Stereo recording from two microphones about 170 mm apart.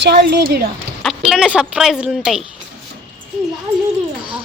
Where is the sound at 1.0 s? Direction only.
5° right (ahead or behind).